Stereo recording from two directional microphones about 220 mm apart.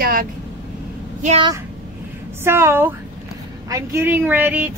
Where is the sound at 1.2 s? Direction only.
25° right (ahead or behind).